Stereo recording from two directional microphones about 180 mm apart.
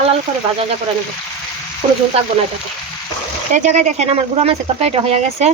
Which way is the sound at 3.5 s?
45° right (ahead or behind).